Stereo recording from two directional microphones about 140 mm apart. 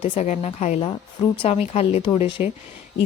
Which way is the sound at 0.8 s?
40° left (ahead or behind).